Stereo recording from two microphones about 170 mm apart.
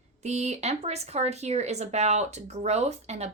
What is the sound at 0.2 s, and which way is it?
Speech, 40° right (ahead or behind).